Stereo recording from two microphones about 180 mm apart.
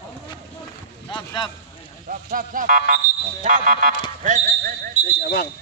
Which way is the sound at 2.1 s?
50° right (ahead or behind).